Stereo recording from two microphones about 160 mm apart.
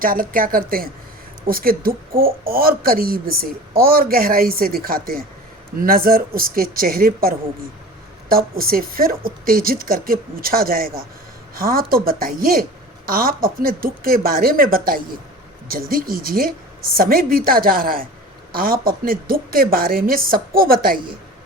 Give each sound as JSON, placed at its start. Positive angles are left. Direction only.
{"t": 0.0, "sound": "speech", "side_deg": -60}